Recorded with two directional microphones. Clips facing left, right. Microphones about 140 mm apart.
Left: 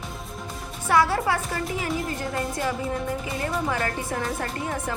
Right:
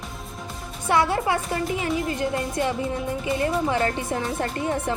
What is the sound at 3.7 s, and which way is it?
Music, 25° right (ahead or behind).